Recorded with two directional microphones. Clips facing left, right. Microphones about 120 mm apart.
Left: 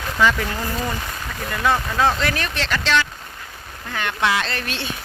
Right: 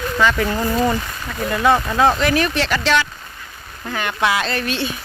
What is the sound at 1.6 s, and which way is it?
Speech, 20° right (ahead or behind).